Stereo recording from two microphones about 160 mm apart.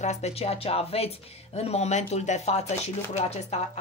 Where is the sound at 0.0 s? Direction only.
45° left (ahead or behind).